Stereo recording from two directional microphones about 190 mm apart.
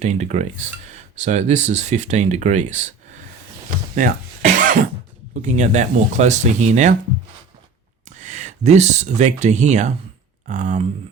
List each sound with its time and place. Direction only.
0.0 s speech: 35° right (ahead or behind)
3.9 s speech: 45° right (ahead or behind)
8.0 s speech: 40° right (ahead or behind)